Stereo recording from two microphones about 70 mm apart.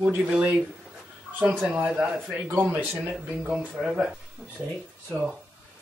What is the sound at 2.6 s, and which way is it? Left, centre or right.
Speech, right.